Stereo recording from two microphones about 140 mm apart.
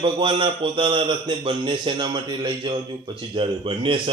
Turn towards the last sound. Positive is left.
turn(degrees=-40)  # may be behind; listen again after turning